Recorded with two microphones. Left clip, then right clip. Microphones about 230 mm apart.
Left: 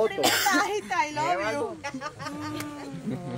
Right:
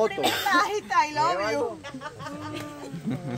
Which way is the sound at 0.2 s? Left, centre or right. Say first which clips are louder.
Left 2 dB; left.